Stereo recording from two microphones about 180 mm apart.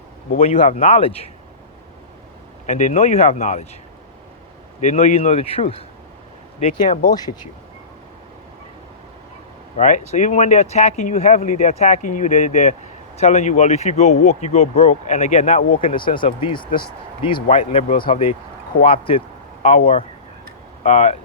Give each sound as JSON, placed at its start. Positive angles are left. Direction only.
{"t": 0.4, "sound": "speech", "side_deg": 40}
{"t": 2.6, "sound": "speech", "side_deg": 40}
{"t": 4.8, "sound": "speech", "side_deg": 40}
{"t": 7.1, "sound": "speech", "side_deg": 20}
{"t": 9.7, "sound": "speech", "side_deg": 40}
{"t": 20.8, "sound": "speech", "side_deg": 40}